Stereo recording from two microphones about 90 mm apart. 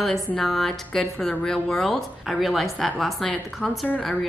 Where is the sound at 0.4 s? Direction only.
5° left (ahead or behind).